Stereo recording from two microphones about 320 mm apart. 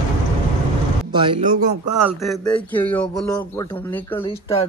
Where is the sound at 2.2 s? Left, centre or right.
Centre.